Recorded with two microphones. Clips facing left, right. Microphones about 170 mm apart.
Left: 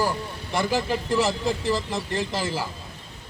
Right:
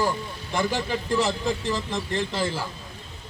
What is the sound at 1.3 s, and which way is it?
Speech, 35° left (ahead or behind).